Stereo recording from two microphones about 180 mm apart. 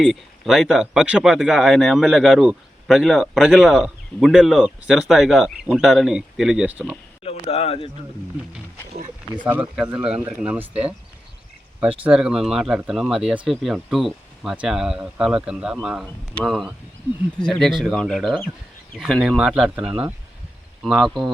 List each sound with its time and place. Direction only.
0.0 s speech: centre (ahead or behind)
7.3 s speech: 35° left (ahead or behind)
9.4 s speech: 10° right (ahead or behind)
12.0 s speech: 5° right (ahead or behind)